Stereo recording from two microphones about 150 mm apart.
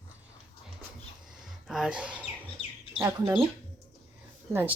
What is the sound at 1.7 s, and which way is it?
Speech, 5° right (ahead or behind).